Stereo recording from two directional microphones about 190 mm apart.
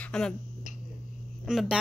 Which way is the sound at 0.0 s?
5° left (ahead or behind).